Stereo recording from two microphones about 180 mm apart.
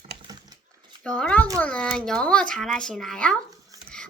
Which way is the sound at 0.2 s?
25° right (ahead or behind).